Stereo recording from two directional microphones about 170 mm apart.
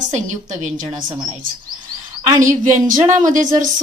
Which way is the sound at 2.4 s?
50° right (ahead or behind).